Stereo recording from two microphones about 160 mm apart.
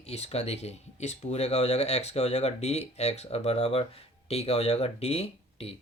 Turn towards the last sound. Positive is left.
turn(degrees=40)  # may be behind; listen again after turning